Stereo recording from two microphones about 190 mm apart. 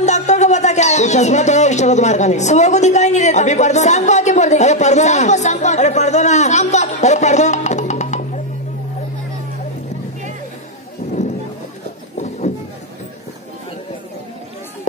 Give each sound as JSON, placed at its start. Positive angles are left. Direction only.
{"t": 0.0, "sound": "speech", "side_deg": 35}